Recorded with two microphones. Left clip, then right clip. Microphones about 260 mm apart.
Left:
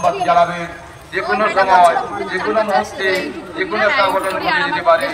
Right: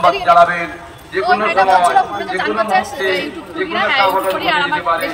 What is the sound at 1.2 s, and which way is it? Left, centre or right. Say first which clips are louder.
Speech: right 2 dB; centre.